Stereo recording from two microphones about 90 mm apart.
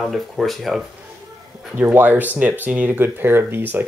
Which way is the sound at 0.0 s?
Centre (ahead or behind).